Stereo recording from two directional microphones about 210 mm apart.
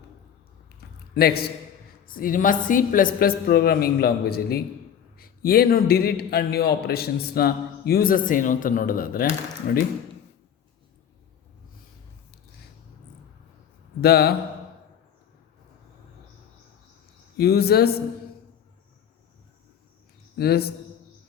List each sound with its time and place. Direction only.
0.8 s a sound: 50° left (ahead or behind)
2.0 s a woman's voice: 40° left (ahead or behind)
14.0 s a man's voice: 50° left (ahead or behind)
17.3 s a man's voice: 50° left (ahead or behind)
20.3 s a man's voice: 50° left (ahead or behind)